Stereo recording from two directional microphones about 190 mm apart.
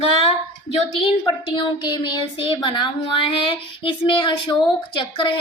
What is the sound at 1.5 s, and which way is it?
A woman's voice, 25° left (ahead or behind).